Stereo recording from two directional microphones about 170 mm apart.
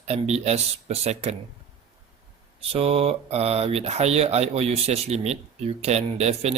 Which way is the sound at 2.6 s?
35° right (ahead or behind).